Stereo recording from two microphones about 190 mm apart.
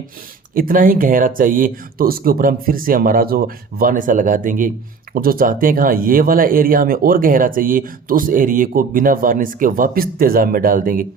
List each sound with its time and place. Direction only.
0.5 s speech: 45° right (ahead or behind)